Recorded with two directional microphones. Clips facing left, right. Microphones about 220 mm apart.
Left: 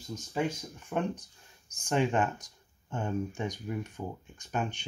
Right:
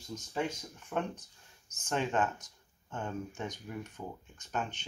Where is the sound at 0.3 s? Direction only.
10° left (ahead or behind).